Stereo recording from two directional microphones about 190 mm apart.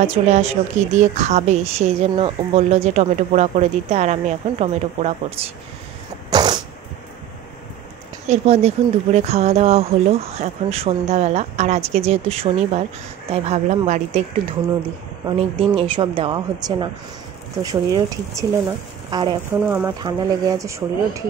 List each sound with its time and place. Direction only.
0.0 s speech: 35° right (ahead or behind)
6.3 s sneeze: 20° right (ahead or behind)
8.3 s speech: 35° right (ahead or behind)
15.2 s speech: 25° right (ahead or behind)
19.6 s speech: 10° right (ahead or behind)
20.0 s speech: 20° right (ahead or behind)